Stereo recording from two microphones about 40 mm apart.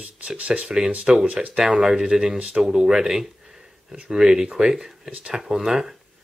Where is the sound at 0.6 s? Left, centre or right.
Centre.